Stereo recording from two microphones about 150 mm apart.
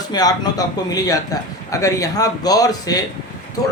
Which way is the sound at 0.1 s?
25° left (ahead or behind).